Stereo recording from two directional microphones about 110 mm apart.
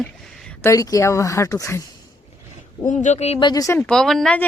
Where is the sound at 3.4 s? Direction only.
35° left (ahead or behind).